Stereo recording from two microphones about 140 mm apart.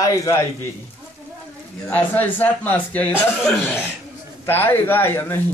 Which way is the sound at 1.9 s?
10° left (ahead or behind).